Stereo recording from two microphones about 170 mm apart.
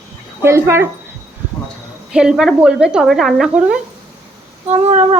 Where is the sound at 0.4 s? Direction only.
15° right (ahead or behind).